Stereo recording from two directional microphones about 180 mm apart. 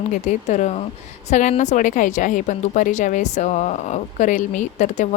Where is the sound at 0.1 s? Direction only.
40° left (ahead or behind).